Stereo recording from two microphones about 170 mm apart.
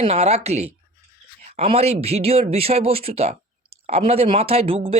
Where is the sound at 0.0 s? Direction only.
35° right (ahead or behind).